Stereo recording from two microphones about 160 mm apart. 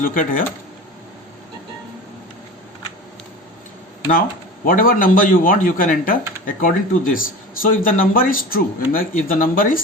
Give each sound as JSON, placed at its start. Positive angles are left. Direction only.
{"t": 0.0, "sound": "a man's voice", "side_deg": 60}
{"t": 4.1, "sound": "a man's voice", "side_deg": 60}